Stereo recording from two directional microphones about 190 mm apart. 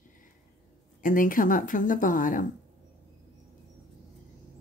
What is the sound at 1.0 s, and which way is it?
Speech, 45° left (ahead or behind).